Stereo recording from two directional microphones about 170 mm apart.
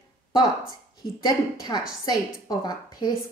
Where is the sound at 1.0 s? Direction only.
25° left (ahead or behind).